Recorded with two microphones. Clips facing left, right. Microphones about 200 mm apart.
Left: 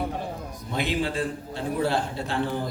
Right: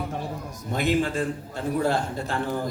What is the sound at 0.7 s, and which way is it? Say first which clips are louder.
A man's voice: right 3 dB; 45° right (ahead or behind).